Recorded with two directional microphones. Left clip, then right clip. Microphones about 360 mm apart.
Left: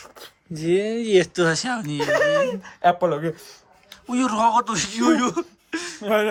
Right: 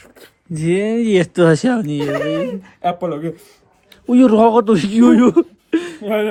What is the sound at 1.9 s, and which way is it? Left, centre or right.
Speech, left.